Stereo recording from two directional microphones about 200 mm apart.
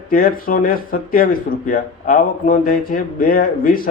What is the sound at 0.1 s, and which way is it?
Speech, 45° left (ahead or behind).